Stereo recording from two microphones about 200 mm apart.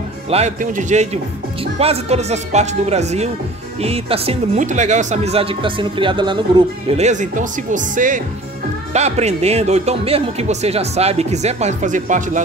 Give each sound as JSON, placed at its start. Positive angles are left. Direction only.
{"t": 0.3, "sound": "speech", "side_deg": -35}